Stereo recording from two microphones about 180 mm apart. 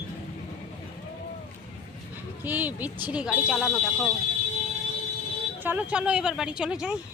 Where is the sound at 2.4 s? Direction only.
10° right (ahead or behind).